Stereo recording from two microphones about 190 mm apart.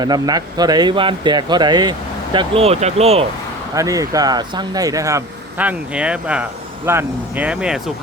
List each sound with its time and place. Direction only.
0.0 s speech: 20° right (ahead or behind)
3.8 s speech: 20° right (ahead or behind)